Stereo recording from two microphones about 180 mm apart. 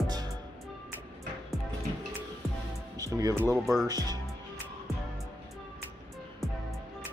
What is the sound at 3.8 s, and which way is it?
Speech, 20° right (ahead or behind).